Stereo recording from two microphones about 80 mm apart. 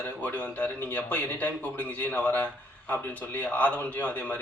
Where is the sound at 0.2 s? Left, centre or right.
Centre.